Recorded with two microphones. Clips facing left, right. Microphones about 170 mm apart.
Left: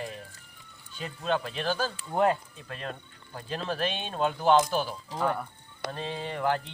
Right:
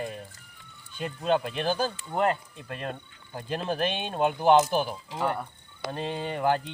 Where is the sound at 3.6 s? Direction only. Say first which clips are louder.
Right 2 dB; 45° right (ahead or behind).